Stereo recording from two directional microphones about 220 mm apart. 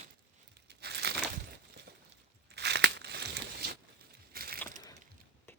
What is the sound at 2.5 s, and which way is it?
Crumpling, 50° right (ahead or behind).